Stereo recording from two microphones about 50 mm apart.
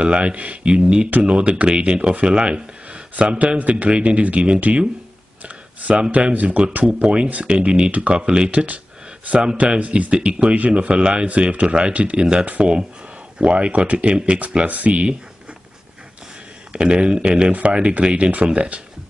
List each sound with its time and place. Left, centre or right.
0.0 s speech: right
5.4 s computer keyboard: right
6.1 s speech: right
16.7 s speech: right